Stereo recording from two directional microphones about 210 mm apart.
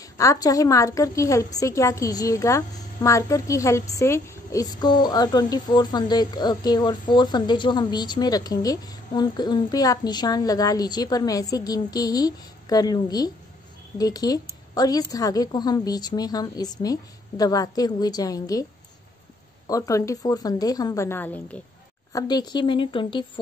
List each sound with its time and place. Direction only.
0.0 s a woman's voice: 15° left (ahead or behind)
19.7 s a woman's voice: 15° left (ahead or behind)
22.1 s a woman's voice: 20° left (ahead or behind)